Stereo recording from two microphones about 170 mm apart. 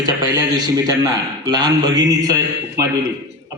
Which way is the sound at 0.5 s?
20° right (ahead or behind).